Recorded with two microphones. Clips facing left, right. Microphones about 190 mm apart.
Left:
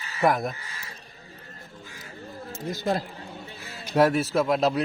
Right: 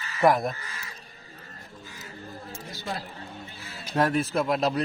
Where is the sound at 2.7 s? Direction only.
45° left (ahead or behind).